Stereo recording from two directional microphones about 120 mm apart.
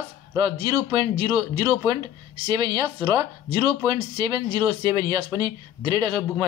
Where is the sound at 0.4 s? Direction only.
45° right (ahead or behind).